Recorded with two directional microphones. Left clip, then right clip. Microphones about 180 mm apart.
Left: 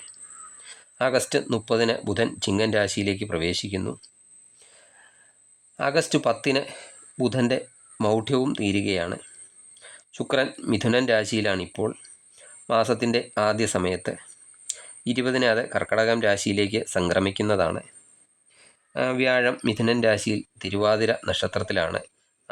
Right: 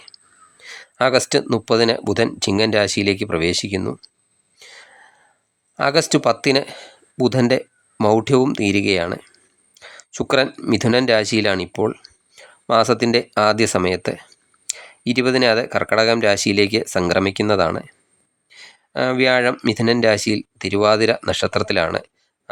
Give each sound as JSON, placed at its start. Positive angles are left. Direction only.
{"t": 0.6, "sound": "speech", "side_deg": -20}
{"t": 4.5, "sound": "throat clearing", "side_deg": -20}
{"t": 5.7, "sound": "speech", "side_deg": -20}